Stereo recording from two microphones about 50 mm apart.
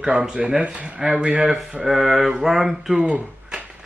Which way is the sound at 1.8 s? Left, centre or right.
Centre.